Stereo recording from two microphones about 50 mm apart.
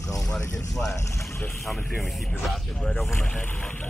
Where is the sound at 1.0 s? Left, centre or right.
Left.